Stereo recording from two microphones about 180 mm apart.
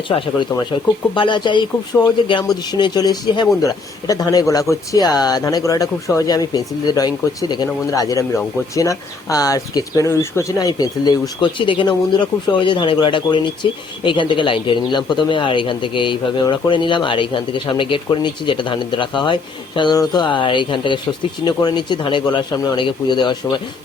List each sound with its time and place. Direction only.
1.1 s speech: 25° left (ahead or behind)